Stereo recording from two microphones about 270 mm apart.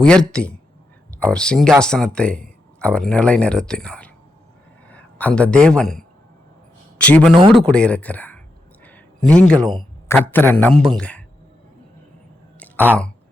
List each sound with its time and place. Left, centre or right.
0.0 s a man's voice: centre
7.3 s speech: centre
7.7 s speech: centre
8.8 s a sound: centre
9.7 s a man's voice: centre
12.5 s a sound: centre